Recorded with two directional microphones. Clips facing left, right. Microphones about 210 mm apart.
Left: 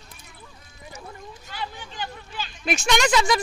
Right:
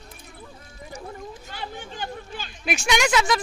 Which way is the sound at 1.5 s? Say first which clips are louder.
Left 4 dB; 50° right (ahead or behind).